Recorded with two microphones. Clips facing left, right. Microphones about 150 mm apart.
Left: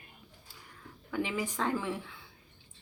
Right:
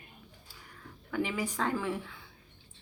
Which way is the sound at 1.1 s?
10° left (ahead or behind).